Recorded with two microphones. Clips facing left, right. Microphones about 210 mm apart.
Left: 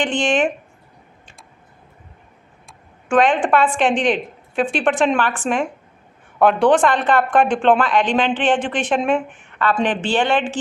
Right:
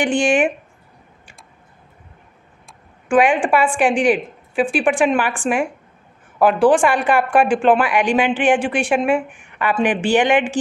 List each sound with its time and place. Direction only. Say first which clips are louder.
0.0 s speech: right 2 dB; 10° right (ahead or behind)
3.1 s speech: right 1 dB; 10° right (ahead or behind)